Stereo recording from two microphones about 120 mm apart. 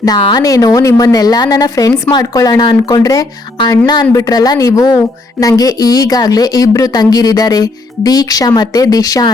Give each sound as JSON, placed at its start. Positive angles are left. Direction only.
{"t": 0.2, "sound": "a woman's voice", "side_deg": 40}